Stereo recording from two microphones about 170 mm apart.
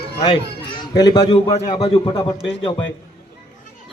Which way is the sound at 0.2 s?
30° left (ahead or behind).